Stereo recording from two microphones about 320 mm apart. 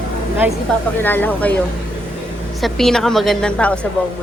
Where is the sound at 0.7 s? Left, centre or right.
Centre.